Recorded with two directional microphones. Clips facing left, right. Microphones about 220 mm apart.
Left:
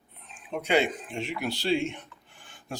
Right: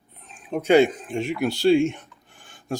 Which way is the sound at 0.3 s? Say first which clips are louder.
Right 8 dB; 45° right (ahead or behind).